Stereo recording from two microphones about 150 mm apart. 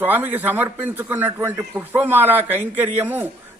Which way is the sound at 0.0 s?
10° right (ahead or behind).